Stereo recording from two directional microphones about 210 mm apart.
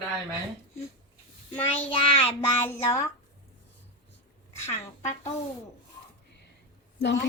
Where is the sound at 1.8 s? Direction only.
25° left (ahead or behind).